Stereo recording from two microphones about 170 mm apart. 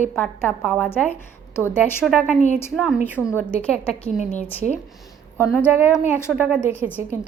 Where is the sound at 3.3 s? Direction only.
10° left (ahead or behind).